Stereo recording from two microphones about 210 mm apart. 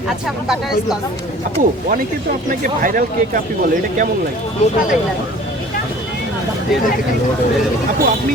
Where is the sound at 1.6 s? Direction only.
40° right (ahead or behind).